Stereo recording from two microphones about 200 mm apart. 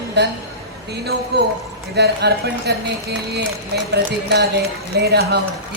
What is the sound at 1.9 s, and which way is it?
Speech, 55° right (ahead or behind).